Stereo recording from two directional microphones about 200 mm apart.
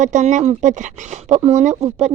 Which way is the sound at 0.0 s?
35° right (ahead or behind).